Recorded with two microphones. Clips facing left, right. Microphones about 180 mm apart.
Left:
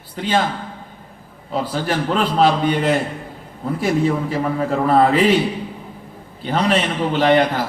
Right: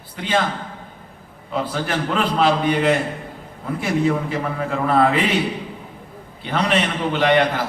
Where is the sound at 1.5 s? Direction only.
35° left (ahead or behind).